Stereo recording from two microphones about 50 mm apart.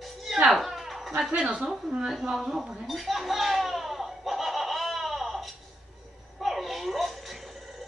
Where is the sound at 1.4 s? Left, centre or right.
Centre.